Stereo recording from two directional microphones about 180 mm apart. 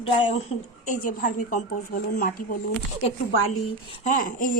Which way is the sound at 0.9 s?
45° left (ahead or behind).